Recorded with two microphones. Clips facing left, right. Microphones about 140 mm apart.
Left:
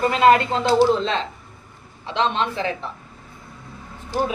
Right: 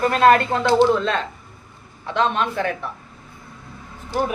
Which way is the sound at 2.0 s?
55° right (ahead or behind).